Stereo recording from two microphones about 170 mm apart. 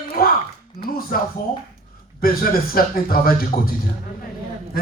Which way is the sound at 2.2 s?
60° left (ahead or behind).